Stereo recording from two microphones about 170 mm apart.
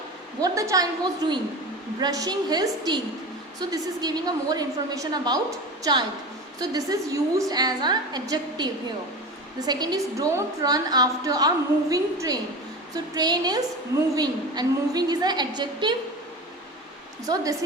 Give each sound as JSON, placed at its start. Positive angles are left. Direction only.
{"t": 0.4, "sound": "a woman's voice", "side_deg": -20}